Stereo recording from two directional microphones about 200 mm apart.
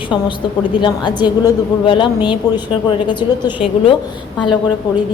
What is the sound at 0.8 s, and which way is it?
A woman's voice, 20° left (ahead or behind).